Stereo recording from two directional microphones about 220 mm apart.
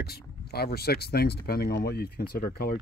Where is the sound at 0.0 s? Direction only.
45° left (ahead or behind).